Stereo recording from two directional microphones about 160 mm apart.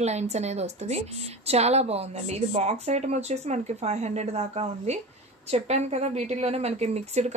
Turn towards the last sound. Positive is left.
turn(degrees=-40)  # may be behind; listen again after turning